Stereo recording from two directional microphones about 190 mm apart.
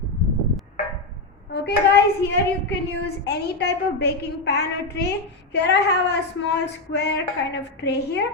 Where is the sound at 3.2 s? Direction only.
60° left (ahead or behind).